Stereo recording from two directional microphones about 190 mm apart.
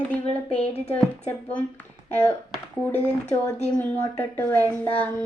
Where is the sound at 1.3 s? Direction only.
10° left (ahead or behind).